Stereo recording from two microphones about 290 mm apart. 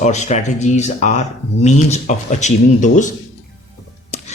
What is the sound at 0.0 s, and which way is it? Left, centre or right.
Speech, left.